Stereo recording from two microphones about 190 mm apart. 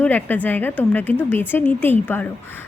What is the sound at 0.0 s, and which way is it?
A woman's voice, 10° left (ahead or behind).